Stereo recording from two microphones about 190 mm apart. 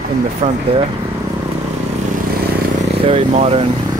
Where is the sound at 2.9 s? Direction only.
30° right (ahead or behind).